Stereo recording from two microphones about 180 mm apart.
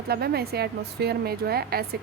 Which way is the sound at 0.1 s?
60° right (ahead or behind).